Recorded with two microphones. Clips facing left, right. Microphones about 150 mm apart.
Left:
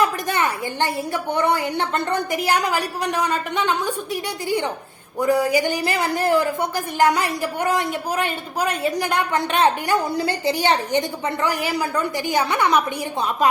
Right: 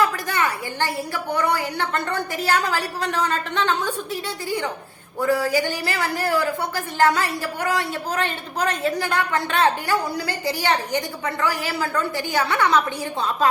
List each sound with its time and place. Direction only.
0.0 s a woman's voice: 20° left (ahead or behind)